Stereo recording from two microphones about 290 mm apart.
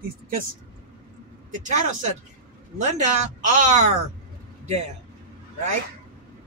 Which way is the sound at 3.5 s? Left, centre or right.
Right.